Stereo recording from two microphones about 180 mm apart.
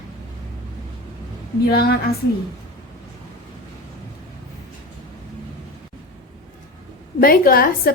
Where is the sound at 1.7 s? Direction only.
55° left (ahead or behind).